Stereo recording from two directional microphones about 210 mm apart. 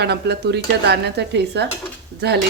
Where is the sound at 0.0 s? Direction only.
50° right (ahead or behind).